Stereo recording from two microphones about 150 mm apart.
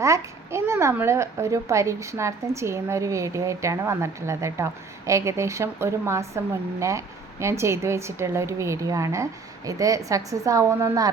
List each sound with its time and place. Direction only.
0.0 s a child's voice: 20° right (ahead or behind)